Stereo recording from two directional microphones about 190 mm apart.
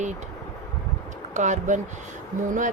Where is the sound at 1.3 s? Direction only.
40° right (ahead or behind).